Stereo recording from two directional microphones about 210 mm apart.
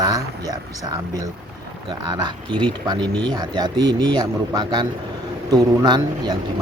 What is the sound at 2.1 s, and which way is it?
Speech, 20° right (ahead or behind).